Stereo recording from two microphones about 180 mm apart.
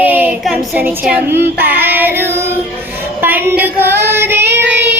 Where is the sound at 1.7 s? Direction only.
10° right (ahead or behind).